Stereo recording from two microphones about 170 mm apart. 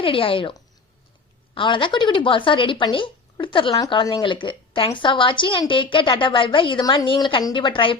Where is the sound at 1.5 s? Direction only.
30° left (ahead or behind).